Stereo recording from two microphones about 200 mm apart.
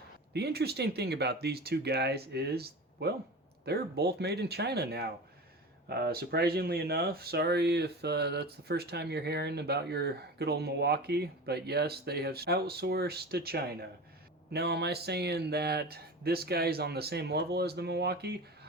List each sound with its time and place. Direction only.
0.3 s speech: 55° right (ahead or behind)